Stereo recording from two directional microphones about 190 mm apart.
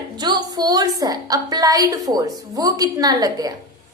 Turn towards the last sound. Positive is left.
turn(degrees=-20)  # may be behind; listen again after turning